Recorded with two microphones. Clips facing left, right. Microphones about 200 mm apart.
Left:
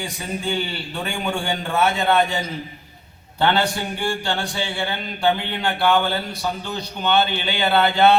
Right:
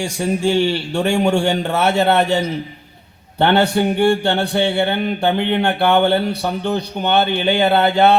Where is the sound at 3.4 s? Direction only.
60° right (ahead or behind).